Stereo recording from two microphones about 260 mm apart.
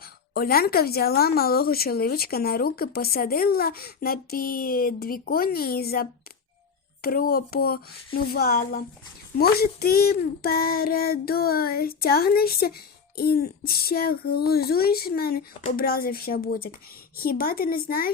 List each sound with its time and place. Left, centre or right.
0.3 s speech: left